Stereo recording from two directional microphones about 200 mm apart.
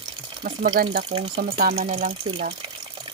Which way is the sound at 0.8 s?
50° right (ahead or behind).